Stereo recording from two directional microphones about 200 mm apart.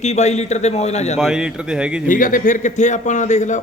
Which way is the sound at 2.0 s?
40° left (ahead or behind).